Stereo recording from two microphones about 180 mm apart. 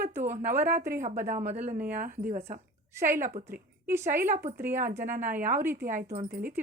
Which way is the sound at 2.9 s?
15° right (ahead or behind).